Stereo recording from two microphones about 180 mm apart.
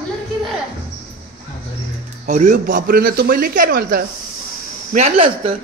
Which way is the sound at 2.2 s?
45° right (ahead or behind).